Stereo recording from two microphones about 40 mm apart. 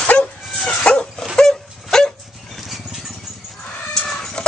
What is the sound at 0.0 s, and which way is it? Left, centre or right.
Dog, left.